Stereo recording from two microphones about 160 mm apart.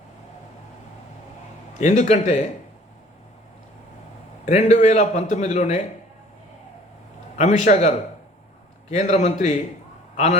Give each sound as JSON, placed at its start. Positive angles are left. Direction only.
{"t": 1.8, "sound": "a man's voice", "side_deg": 45}
{"t": 4.4, "sound": "a man's voice", "side_deg": 45}
{"t": 7.3, "sound": "a man's voice", "side_deg": 50}